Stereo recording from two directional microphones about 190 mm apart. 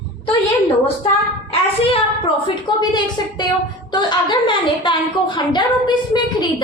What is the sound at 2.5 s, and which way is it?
A woman's voice, 25° left (ahead or behind).